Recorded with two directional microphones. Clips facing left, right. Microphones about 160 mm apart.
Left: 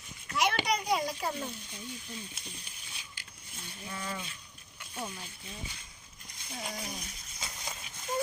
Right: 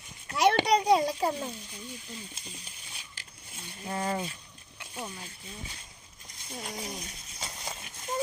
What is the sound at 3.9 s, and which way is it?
Speech, 45° right (ahead or behind).